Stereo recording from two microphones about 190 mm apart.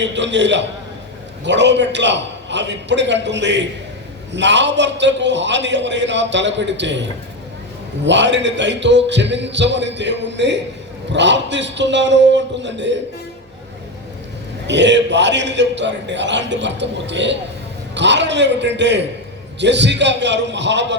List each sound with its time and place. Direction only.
0.0 s a man's voice: 70° right (ahead or behind)
8.0 s a man's voice: 70° right (ahead or behind)
14.7 s a man's voice: 70° right (ahead or behind)